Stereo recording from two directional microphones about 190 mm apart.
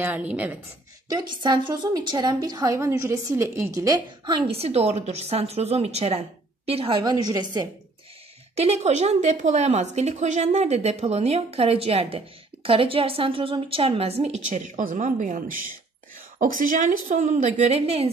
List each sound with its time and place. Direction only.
0.0 s a woman's voice: 10° right (ahead or behind)
1.0 s a woman's voice: 20° right (ahead or behind)
8.5 s a woman's voice: 35° right (ahead or behind)